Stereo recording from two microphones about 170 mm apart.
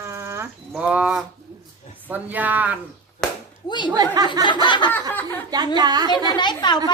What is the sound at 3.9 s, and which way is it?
Speech, 25° right (ahead or behind).